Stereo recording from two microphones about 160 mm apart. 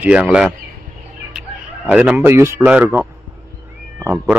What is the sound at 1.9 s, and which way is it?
Speech, 10° right (ahead or behind).